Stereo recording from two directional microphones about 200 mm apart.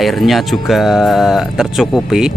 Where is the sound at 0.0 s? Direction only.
Centre (ahead or behind).